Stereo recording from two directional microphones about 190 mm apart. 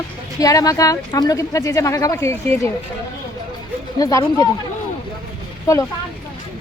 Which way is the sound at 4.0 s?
20° left (ahead or behind).